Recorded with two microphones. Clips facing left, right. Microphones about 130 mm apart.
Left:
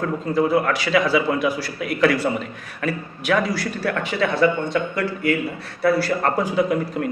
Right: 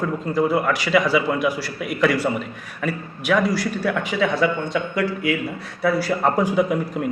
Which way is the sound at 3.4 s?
10° right (ahead or behind).